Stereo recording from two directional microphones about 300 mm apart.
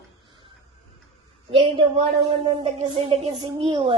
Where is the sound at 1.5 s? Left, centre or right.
Centre.